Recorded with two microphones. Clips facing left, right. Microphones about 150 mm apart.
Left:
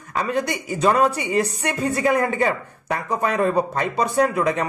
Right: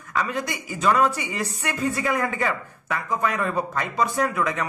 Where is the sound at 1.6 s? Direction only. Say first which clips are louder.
Left 4 dB; 35° left (ahead or behind).